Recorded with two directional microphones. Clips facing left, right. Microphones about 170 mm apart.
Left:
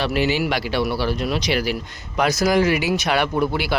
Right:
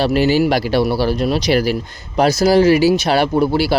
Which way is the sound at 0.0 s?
35° right (ahead or behind).